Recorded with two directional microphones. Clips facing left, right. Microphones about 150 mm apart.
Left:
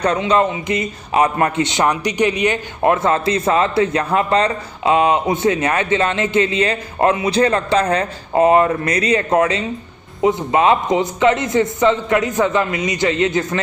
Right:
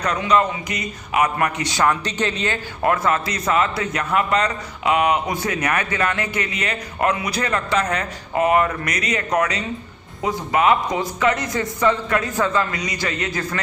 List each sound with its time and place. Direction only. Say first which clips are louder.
0.0 s a man's voice: left 3 dB; 30° left (ahead or behind)